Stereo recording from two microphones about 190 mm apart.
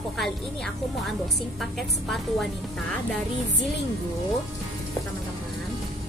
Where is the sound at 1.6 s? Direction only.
Centre (ahead or behind).